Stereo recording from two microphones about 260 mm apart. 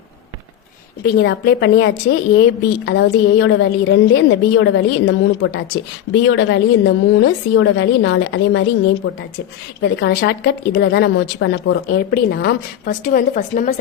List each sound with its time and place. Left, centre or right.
1.0 s a woman's voice: left